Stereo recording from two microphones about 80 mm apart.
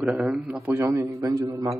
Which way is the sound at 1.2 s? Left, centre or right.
Right.